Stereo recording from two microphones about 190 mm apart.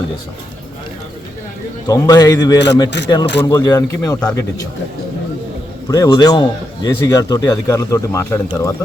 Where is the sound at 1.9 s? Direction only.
20° left (ahead or behind).